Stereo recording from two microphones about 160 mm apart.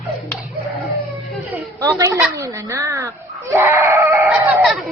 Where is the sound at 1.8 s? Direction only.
20° right (ahead or behind).